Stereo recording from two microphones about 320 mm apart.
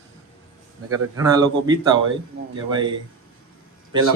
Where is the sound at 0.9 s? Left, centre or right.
Centre.